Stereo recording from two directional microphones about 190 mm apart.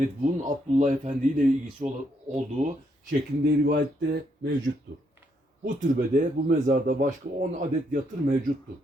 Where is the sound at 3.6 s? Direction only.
60° right (ahead or behind).